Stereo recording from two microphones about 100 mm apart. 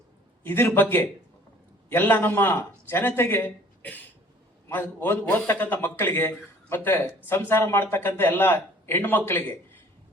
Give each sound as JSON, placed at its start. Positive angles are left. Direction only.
{"t": 0.4, "sound": "a man's voice", "side_deg": 20}